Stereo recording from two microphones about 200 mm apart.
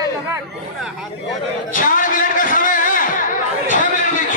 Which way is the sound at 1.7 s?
40° left (ahead or behind).